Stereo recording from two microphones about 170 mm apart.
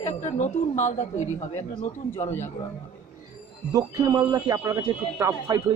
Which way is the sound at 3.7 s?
20° right (ahead or behind).